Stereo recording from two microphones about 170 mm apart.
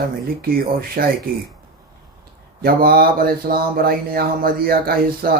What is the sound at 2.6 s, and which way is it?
Mantra, 60° right (ahead or behind).